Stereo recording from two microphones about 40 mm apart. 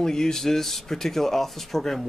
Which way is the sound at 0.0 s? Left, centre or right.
Centre.